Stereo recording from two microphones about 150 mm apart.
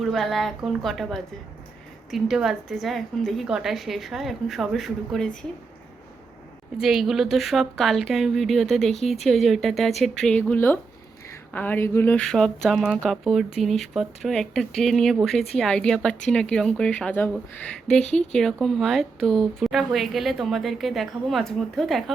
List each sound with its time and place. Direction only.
0.0 s speech: centre (ahead or behind)
6.7 s speech: centre (ahead or behind); by 12.2 s 15° left (ahead or behind)
12.2 s speech: 5° left (ahead or behind)